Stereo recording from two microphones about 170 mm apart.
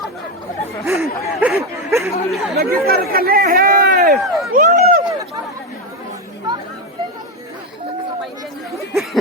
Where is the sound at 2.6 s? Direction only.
60° right (ahead or behind).